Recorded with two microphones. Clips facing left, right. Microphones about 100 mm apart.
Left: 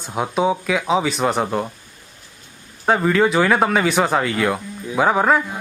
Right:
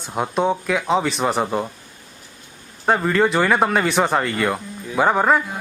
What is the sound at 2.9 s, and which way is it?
Speech, centre (ahead or behind).